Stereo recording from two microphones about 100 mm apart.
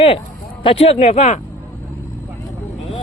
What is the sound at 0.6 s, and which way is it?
Speech, 70° left (ahead or behind).